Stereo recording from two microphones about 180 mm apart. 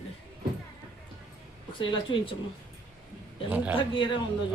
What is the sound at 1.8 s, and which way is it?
Speech, 30° left (ahead or behind).